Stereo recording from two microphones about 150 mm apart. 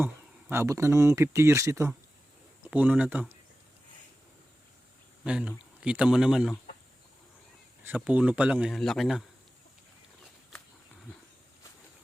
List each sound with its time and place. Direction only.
0.5 s a man's voice: 20° right (ahead or behind)
5.2 s speech: 5° right (ahead or behind)
7.9 s a man's voice: 10° right (ahead or behind)